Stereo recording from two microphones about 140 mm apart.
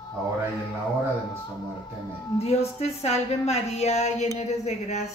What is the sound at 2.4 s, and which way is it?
Speech, 50° left (ahead or behind).